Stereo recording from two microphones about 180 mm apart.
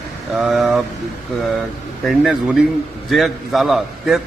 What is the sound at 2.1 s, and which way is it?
A man's voice, centre (ahead or behind).